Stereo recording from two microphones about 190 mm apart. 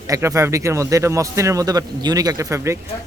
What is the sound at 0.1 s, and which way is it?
Speech, 15° right (ahead or behind).